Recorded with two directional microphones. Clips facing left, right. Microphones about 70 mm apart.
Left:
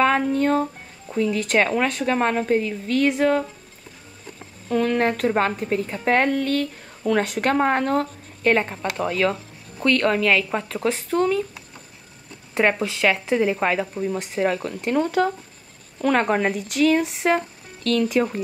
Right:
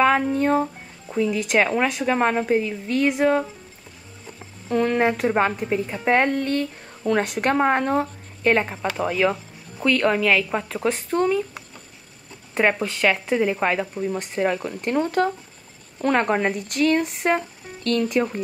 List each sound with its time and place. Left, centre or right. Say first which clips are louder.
0.0 s a woman's voice: even; centre
4.6 s a woman's voice: right 1 dB; centre
12.5 s speech: even; centre